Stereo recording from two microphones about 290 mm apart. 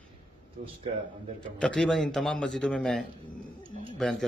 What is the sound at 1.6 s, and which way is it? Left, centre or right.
A man's voice, centre.